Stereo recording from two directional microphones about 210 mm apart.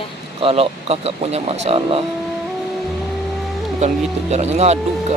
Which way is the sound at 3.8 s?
30° right (ahead or behind).